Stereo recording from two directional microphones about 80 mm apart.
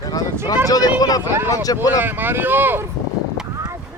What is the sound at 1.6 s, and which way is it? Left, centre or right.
Speech, left.